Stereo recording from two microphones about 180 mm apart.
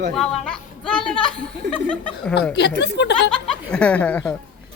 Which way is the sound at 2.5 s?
70° left (ahead or behind).